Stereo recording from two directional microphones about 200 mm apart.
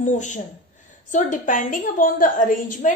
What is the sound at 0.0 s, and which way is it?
A woman's voice, 35° left (ahead or behind).